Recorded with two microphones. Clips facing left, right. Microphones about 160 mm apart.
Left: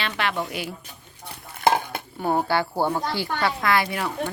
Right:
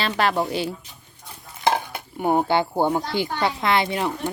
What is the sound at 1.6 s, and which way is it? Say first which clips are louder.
Dishes: left 1 dB; 55° left (ahead or behind).